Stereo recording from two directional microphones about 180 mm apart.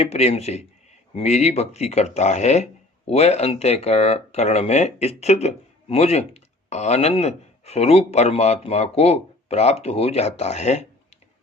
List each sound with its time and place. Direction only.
0.0 s speech: 35° left (ahead or behind)